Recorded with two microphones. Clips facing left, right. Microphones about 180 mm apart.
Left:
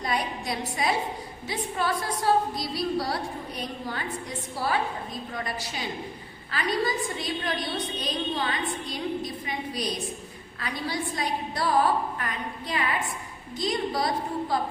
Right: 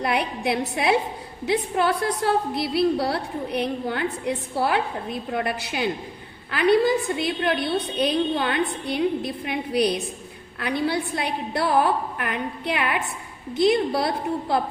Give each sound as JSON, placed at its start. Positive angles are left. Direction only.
{"t": 0.0, "sound": "a woman's voice", "side_deg": -65}